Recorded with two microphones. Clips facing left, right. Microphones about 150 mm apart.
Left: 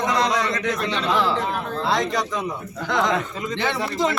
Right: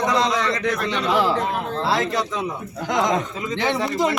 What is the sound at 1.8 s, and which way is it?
Speech, 5° right (ahead or behind).